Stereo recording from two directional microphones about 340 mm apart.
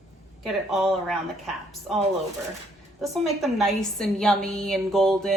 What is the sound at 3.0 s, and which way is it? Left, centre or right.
A woman's voice, centre.